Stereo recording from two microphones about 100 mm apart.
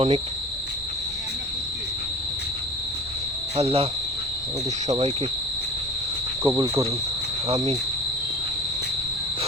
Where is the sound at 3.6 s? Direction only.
70° right (ahead or behind).